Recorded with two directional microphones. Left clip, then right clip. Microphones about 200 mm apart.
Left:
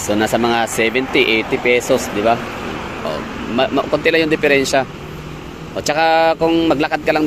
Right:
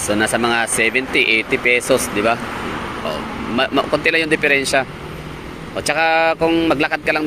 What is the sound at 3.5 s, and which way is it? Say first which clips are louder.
Speech: left 1 dB; 10° left (ahead or behind).